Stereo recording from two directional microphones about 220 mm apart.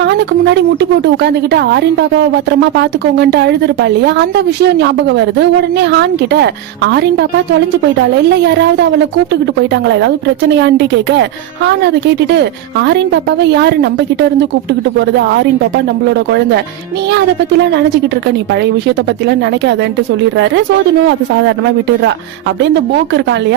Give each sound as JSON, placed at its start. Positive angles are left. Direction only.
{"t": 0.0, "sound": "speech", "side_deg": -50}
{"t": 8.4, "sound": "speech", "side_deg": -50}
{"t": 22.6, "sound": "speech", "side_deg": -55}